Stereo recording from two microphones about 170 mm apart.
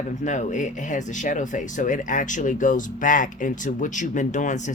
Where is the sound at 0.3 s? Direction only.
45° left (ahead or behind).